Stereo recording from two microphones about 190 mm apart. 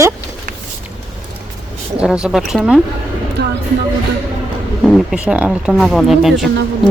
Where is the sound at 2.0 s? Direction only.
5° right (ahead or behind).